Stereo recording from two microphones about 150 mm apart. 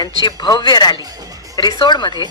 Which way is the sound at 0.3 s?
25° left (ahead or behind).